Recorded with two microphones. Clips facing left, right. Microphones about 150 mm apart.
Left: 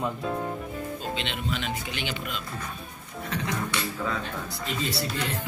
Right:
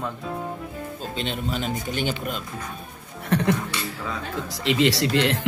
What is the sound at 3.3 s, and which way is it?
Speech, 65° right (ahead or behind).